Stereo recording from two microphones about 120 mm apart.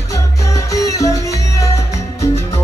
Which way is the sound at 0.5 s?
25° left (ahead or behind).